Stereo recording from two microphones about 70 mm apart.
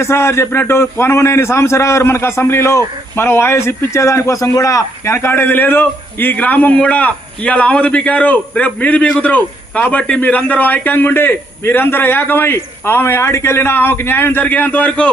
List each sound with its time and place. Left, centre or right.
0.0 s a man's voice: left; by 15.1 s centre